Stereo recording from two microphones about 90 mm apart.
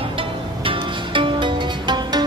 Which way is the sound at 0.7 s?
65° right (ahead or behind).